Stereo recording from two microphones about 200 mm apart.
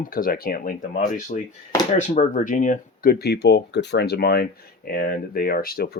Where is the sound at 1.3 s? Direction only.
35° left (ahead or behind).